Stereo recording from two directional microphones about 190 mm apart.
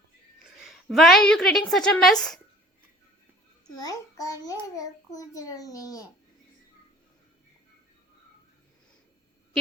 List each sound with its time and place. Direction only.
0.6 s a woman's voice: centre (ahead or behind)
3.8 s a child's voice: 20° left (ahead or behind)